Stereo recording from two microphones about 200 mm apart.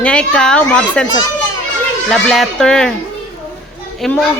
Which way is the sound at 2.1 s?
Centre (ahead or behind).